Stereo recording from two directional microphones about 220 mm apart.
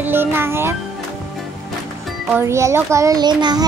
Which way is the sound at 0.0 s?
10° right (ahead or behind).